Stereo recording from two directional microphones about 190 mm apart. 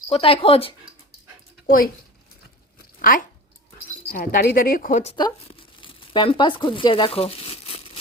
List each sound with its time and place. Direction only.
0.1 s speech: 30° left (ahead or behind)
3.0 s speech: 45° left (ahead or behind)
5.1 s speech: 25° left (ahead or behind)